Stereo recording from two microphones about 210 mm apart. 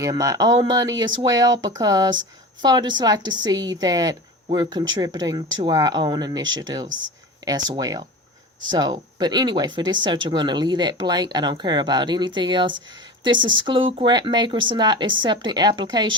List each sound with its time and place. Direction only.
0.0 s speech: 15° right (ahead or behind)
6.8 s speech: 40° right (ahead or behind)
7.4 s speech: 20° right (ahead or behind)